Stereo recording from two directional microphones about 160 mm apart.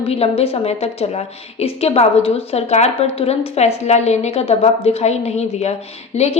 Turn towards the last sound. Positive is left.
turn(degrees=45)  # may be behind; listen again after turning